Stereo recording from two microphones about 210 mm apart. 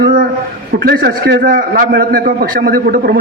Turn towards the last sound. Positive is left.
turn(degrees=-45)  # may be behind; listen again after turning